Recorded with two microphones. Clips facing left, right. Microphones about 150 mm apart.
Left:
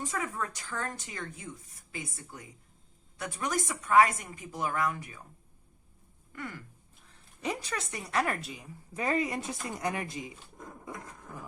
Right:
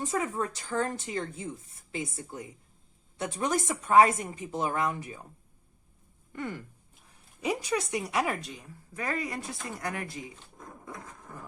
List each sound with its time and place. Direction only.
0.0 s a woman's voice: 25° right (ahead or behind)
6.3 s a woman's voice: 25° right (ahead or behind)
7.4 s a woman's voice: 10° right (ahead or behind)
8.9 s speech: 20° left (ahead or behind)